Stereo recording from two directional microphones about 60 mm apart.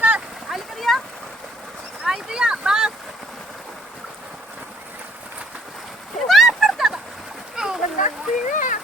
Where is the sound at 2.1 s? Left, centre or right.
Centre.